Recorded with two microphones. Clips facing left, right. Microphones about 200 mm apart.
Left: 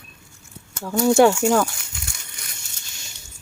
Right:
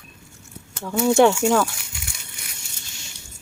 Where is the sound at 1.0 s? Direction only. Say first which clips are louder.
Left 1 dB; 5° left (ahead or behind).